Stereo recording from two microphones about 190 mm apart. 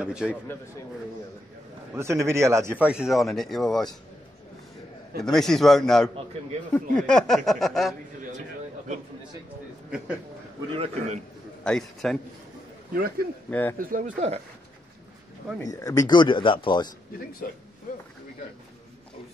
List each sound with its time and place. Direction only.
0.0 s speech: 5° right (ahead or behind)
2.0 s speech: 15° right (ahead or behind); by 3.9 s centre (ahead or behind)
5.2 s speech: centre (ahead or behind)
9.8 s speech: 5° right (ahead or behind)
10.7 s a man's voice: 30° right (ahead or behind)
11.6 s speech: 5° left (ahead or behind)
13.5 s speech: 10° left (ahead or behind)
13.7 s speech: 45° right (ahead or behind)
15.6 s speech: 20° left (ahead or behind)
17.9 s speech: 45° left (ahead or behind)